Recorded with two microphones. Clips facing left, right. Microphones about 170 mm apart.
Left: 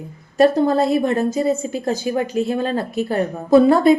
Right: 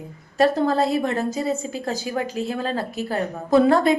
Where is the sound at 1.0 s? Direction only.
45° left (ahead or behind).